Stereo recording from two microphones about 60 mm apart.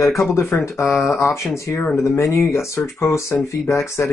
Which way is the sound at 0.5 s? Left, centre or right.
Left.